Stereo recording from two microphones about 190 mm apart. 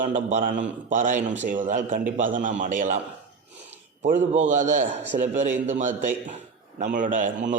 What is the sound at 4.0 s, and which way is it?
A man's voice, 40° right (ahead or behind).